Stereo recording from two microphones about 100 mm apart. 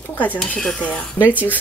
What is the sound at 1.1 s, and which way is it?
Speech, 15° right (ahead or behind).